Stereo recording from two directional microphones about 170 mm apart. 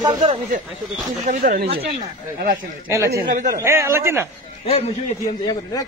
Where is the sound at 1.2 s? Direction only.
50° right (ahead or behind).